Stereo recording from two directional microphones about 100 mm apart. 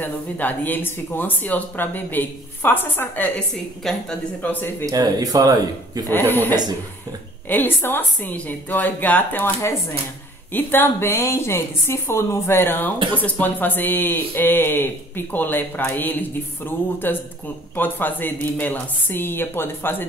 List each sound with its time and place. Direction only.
0.0 s speech: 20° left (ahead or behind)
3.3 s a woman's voice: 10° left (ahead or behind)
4.8 s speech: 40° right (ahead or behind)
6.1 s a woman's voice: 20° left (ahead or behind)
10.5 s speech: 20° left (ahead or behind)